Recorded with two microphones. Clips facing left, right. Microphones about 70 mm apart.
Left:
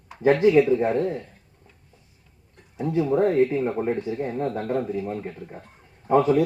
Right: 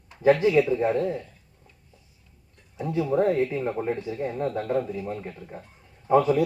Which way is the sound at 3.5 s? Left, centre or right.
Centre.